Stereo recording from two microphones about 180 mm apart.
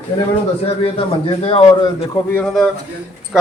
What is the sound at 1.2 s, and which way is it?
Speech, 30° left (ahead or behind).